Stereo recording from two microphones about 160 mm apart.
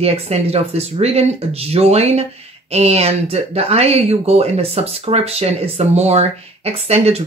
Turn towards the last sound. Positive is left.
turn(degrees=-40)  # may be behind; listen again after turning